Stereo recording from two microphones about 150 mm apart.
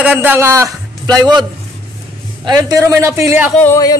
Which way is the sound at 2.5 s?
25° right (ahead or behind).